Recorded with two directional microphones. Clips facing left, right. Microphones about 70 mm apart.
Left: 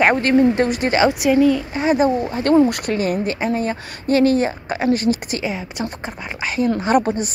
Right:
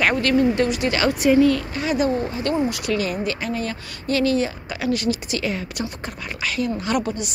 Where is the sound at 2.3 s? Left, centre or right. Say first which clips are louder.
Left 8 dB; left.